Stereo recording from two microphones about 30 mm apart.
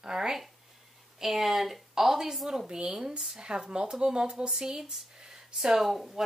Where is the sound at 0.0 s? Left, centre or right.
Right.